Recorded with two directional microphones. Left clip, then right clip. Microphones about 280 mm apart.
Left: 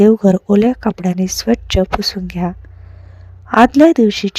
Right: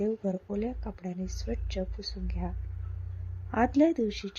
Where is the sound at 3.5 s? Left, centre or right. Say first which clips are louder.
Left 17 dB; left.